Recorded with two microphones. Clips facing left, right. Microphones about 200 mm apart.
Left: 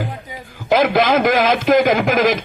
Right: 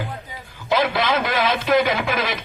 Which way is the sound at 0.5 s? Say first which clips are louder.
Left 6 dB; 50° left (ahead or behind).